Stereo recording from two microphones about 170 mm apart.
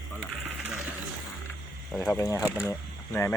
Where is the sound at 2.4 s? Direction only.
15° left (ahead or behind).